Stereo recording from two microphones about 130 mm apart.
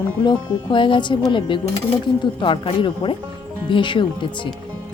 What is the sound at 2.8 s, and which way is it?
A woman's voice, 40° left (ahead or behind).